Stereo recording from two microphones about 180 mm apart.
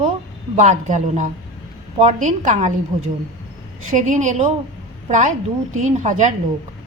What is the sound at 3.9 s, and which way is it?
A woman's voice, 45° right (ahead or behind).